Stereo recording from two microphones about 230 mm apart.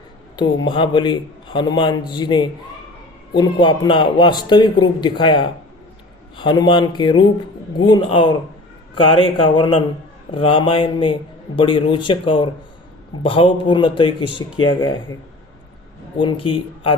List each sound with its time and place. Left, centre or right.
0.3 s a man's voice: left
16.1 s a man's voice: left